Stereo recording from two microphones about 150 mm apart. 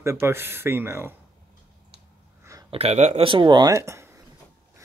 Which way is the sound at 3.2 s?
30° right (ahead or behind).